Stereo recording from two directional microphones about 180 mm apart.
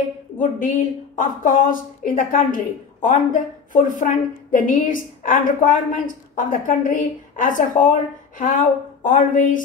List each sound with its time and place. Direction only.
0.4 s a woman's voice: 45° left (ahead or behind)
3.7 s a woman's voice: 45° left (ahead or behind)